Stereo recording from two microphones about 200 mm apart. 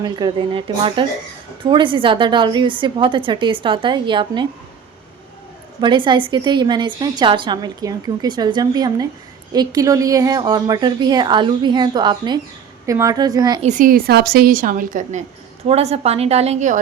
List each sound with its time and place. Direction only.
0.0 s a woman's voice: 20° right (ahead or behind)
5.8 s a woman's voice: 25° right (ahead or behind)
13.6 s a woman's voice: 40° right (ahead or behind)